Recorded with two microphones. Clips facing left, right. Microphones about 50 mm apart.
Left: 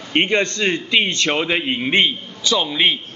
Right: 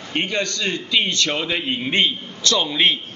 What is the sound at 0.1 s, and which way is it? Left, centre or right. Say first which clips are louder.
A man's voice: left 5 dB; left.